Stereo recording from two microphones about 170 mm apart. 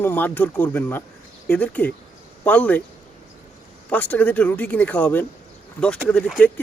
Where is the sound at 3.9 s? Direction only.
10° left (ahead or behind).